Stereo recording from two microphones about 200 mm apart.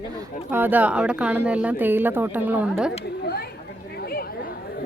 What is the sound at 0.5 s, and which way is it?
Speech, 10° right (ahead or behind).